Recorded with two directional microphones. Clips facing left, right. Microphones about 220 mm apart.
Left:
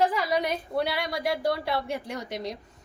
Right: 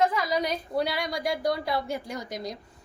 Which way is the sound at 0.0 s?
30° left (ahead or behind).